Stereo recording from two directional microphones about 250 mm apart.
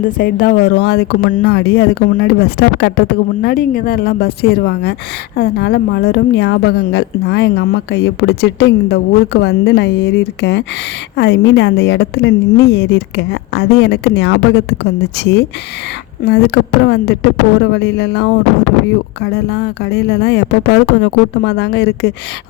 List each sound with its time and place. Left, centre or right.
0.2 s a woman's voice: left